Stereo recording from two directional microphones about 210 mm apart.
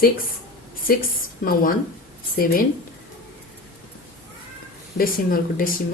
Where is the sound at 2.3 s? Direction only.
45° left (ahead or behind).